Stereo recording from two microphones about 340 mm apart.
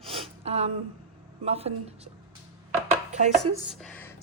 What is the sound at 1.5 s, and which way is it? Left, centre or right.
Speech, centre.